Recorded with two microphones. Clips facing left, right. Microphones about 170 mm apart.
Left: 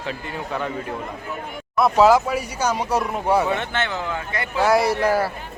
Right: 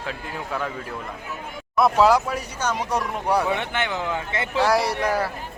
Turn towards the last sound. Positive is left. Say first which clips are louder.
# left 4 dB
turn(degrees=5)  # may be behind; listen again after turning